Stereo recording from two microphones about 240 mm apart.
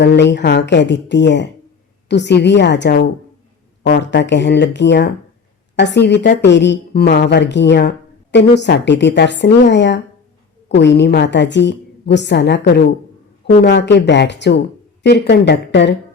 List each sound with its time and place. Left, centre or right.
0.0 s a woman's voice: left